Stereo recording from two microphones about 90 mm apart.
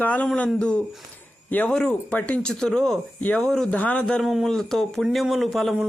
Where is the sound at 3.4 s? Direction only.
5° left (ahead or behind).